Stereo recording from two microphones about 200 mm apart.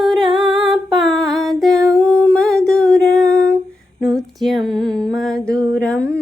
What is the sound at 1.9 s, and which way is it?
Humming, 5° left (ahead or behind).